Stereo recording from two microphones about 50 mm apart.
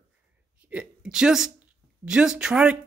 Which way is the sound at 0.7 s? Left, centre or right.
Centre.